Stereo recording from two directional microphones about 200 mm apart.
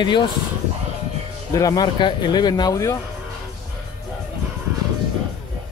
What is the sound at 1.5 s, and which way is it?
Speech, 20° left (ahead or behind).